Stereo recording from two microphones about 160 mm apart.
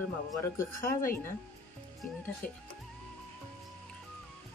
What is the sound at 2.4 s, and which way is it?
Speech, 60° left (ahead or behind).